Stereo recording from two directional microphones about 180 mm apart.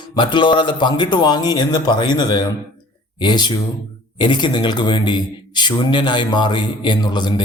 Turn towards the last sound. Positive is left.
turn(degrees=25)  # may be behind; listen again after turning